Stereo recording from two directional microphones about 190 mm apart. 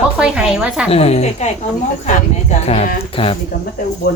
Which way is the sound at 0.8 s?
35° left (ahead or behind).